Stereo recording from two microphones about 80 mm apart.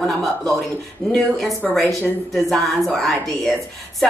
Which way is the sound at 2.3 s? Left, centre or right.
Centre.